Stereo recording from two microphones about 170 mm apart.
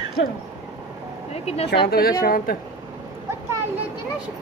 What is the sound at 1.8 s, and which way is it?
Speech, 65° left (ahead or behind).